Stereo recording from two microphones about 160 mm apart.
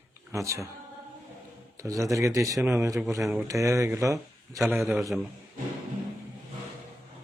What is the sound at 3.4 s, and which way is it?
Speech, 20° right (ahead or behind).